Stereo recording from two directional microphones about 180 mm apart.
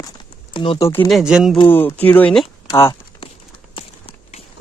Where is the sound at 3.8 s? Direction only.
30° left (ahead or behind).